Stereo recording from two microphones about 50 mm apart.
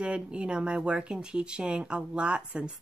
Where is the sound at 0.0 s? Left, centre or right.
Right.